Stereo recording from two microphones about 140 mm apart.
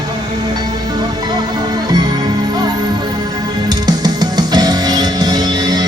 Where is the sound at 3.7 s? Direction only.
30° right (ahead or behind).